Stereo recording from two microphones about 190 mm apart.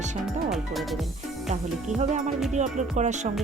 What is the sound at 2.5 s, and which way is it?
Speech, 40° right (ahead or behind).